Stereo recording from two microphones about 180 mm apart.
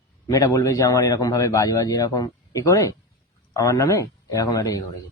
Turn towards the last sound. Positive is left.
turn(degrees=20)  # may be behind; listen again after turning